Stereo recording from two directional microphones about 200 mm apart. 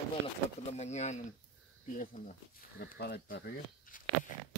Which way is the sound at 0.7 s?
35° left (ahead or behind).